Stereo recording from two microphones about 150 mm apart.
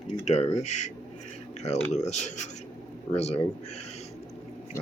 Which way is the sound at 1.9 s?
50° left (ahead or behind).